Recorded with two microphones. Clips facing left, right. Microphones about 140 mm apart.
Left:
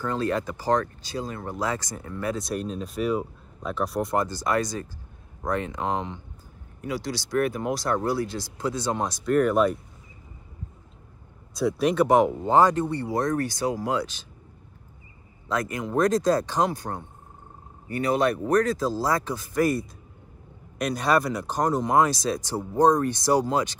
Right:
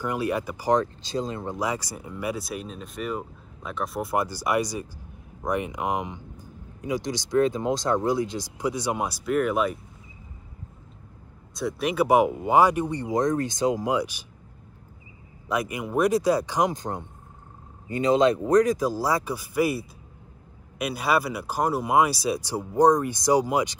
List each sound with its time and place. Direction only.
0.0 s speech: 15° right (ahead or behind)
11.5 s speech: centre (ahead or behind)
15.4 s speech: 10° right (ahead or behind)